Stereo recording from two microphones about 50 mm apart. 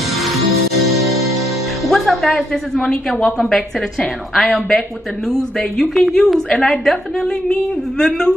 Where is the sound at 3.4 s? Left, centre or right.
Centre.